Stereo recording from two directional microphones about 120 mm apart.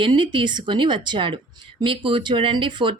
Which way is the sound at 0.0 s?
40° right (ahead or behind).